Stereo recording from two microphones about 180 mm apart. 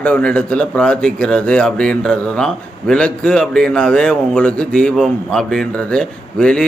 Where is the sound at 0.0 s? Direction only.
5° left (ahead or behind).